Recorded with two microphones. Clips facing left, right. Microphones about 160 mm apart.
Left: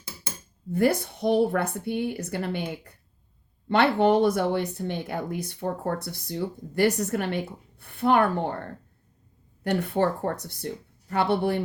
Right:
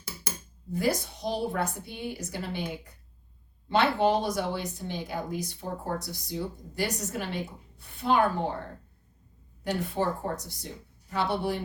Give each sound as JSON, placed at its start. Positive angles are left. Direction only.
{"t": 0.7, "sound": "speech", "side_deg": 60}
{"t": 9.6, "sound": "speech", "side_deg": 60}